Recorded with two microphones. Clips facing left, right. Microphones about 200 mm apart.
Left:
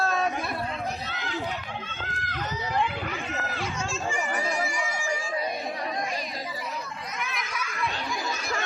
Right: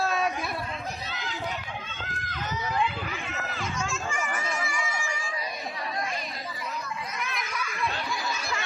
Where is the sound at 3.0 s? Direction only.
35° left (ahead or behind).